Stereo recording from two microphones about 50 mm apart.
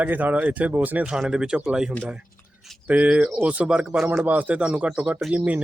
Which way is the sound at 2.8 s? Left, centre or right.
Right.